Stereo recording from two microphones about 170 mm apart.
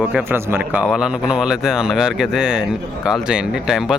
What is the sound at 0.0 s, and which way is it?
A man's voice, 10° right (ahead or behind).